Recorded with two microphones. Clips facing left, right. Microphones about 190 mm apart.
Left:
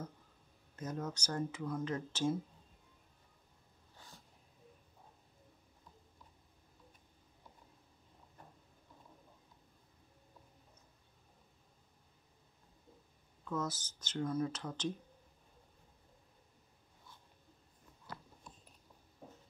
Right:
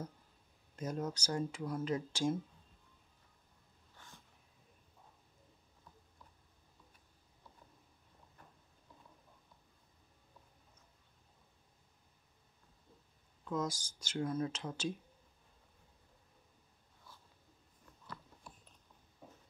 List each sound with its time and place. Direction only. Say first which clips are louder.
0.7 s speech: right 2 dB; 10° right (ahead or behind)
13.5 s speech: right 1 dB; 10° right (ahead or behind)
18.0 s biting: left 1 dB; 20° left (ahead or behind)